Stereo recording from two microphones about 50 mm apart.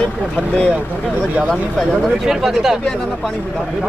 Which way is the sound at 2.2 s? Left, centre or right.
Centre.